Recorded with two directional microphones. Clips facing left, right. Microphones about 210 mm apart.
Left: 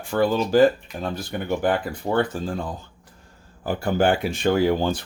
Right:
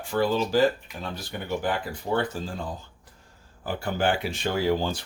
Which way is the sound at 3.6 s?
45° left (ahead or behind).